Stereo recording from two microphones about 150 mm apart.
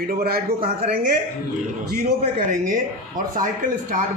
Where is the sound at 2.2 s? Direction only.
60° right (ahead or behind).